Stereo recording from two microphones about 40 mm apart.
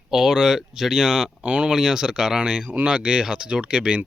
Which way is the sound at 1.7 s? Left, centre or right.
Centre.